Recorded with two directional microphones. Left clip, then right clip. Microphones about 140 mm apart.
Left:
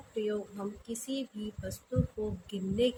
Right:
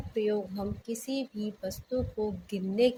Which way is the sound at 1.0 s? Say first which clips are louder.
Right 3 dB; 20° right (ahead or behind).